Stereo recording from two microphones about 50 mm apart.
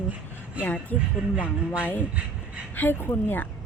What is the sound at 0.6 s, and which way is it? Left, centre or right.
Speech, right.